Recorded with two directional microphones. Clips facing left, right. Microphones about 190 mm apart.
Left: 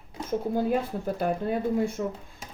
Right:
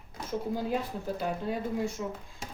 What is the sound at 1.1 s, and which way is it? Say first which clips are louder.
Speech: left 5 dB; 55° left (ahead or behind).